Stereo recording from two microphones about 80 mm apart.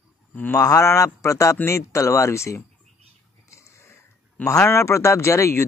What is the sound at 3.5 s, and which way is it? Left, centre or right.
Sniff, left.